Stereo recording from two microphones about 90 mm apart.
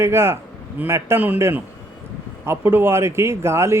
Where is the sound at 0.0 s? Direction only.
30° right (ahead or behind).